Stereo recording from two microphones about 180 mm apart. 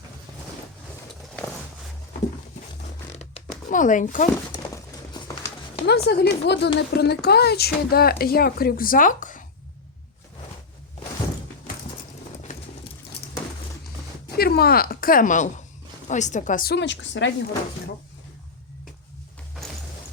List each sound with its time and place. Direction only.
3.7 s speech: 45° left (ahead or behind)
4.5 s horse: 25° left (ahead or behind)
5.8 s speech: 65° left (ahead or behind); by 9.4 s 45° left (ahead or behind)
14.3 s speech: 60° left (ahead or behind); by 17.3 s 90° left